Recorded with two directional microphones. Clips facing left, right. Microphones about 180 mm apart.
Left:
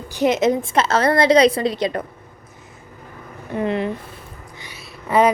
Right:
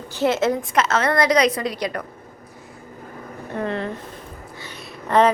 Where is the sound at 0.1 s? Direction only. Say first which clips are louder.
Left 3 dB; 15° left (ahead or behind).